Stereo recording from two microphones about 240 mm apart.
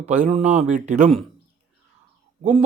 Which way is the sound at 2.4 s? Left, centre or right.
Right.